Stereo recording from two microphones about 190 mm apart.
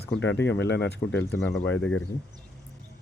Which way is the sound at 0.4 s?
70° left (ahead or behind).